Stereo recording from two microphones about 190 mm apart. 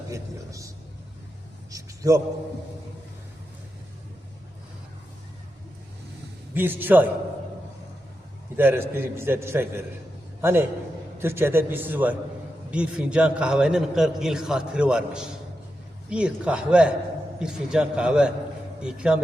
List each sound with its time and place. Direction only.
0.1 s a man's voice: 15° right (ahead or behind)
1.7 s a sound: 15° right (ahead or behind)
6.5 s a man's voice: 10° right (ahead or behind)
8.5 s a man's voice: 10° right (ahead or behind)